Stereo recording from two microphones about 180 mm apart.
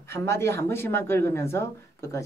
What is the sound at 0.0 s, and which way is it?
Speech, 15° left (ahead or behind).